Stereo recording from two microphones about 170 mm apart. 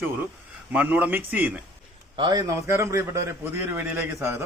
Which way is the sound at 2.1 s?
25° right (ahead or behind).